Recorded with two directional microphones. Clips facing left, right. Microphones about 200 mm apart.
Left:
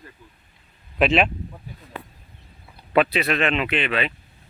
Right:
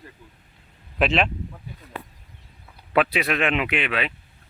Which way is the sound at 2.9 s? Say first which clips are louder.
Left 2 dB; 5° right (ahead or behind).